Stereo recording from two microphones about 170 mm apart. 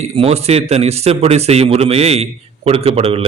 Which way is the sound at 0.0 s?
40° right (ahead or behind).